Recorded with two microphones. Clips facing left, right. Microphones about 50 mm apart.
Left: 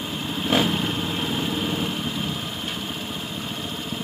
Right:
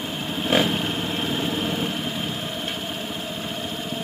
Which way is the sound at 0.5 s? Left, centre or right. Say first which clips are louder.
Right 1 dB; right.